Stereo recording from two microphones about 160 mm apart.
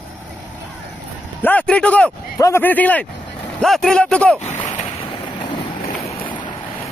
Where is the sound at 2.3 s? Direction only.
15° left (ahead or behind).